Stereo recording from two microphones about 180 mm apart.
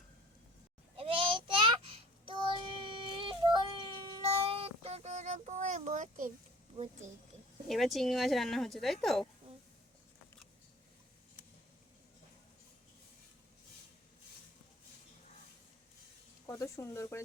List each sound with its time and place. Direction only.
0.9 s child singing: 30° right (ahead or behind); by 6.3 s 45° right (ahead or behind)
7.7 s a woman's voice: centre (ahead or behind)
16.5 s a sound: 15° left (ahead or behind)